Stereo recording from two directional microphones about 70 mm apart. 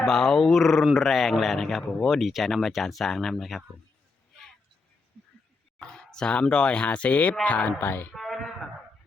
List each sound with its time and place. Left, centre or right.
0.0 s speech: centre
5.9 s speech: centre; by 8.0 s left
8.1 s speech: centre